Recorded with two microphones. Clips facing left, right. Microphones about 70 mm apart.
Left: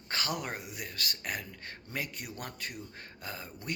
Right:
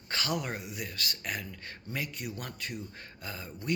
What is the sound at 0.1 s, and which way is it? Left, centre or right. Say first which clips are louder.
Speech: right 2 dB; left.